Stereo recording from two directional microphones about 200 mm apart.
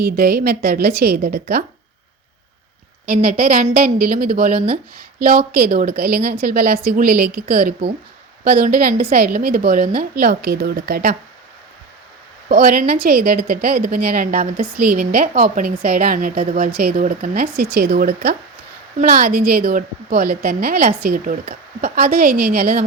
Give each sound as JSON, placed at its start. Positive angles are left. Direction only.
{"t": 0.0, "sound": "a woman's voice", "side_deg": -50}
{"t": 3.1, "sound": "a woman's voice", "side_deg": -45}
{"t": 12.5, "sound": "a woman's voice", "side_deg": -45}